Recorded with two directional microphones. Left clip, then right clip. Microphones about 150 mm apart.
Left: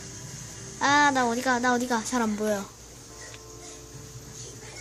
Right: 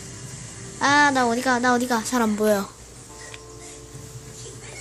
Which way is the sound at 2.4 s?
20° right (ahead or behind).